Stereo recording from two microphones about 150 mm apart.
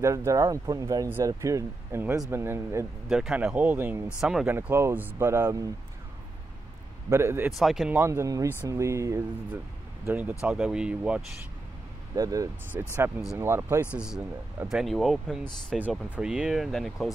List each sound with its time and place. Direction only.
0.0 s speech: 20° right (ahead or behind)
3.1 s speech: 5° right (ahead or behind)
4.2 s speech: centre (ahead or behind)
4.5 s speech: 15° right (ahead or behind)
7.1 s speech: 20° right (ahead or behind)
7.5 s speech: centre (ahead or behind)
7.9 s speech: 15° right (ahead or behind)
12.2 s speech: 25° right (ahead or behind); by 17.1 s centre (ahead or behind)